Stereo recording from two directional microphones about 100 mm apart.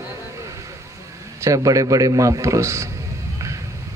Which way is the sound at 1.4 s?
35° right (ahead or behind).